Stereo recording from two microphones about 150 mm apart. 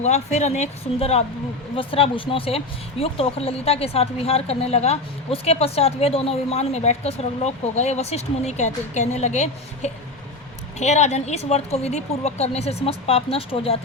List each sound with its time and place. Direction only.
0.0 s speech: 50° left (ahead or behind)